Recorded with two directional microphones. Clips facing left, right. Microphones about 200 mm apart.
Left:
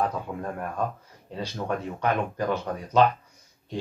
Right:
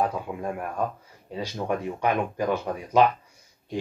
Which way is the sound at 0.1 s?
10° right (ahead or behind).